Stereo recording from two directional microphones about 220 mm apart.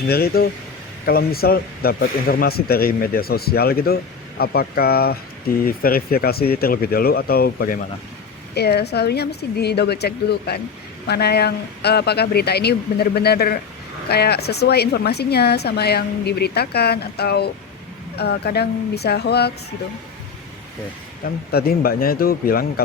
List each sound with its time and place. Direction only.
0.1 s speech: 45° left (ahead or behind)
21.2 s speech: 45° left (ahead or behind)